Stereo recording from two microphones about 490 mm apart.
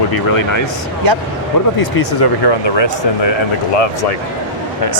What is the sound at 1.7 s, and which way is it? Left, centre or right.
Speech, left.